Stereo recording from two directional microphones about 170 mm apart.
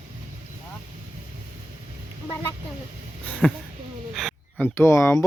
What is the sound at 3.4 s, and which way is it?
Speech, 5° left (ahead or behind).